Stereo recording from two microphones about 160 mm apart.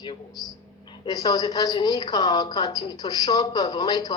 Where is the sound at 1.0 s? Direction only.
25° left (ahead or behind).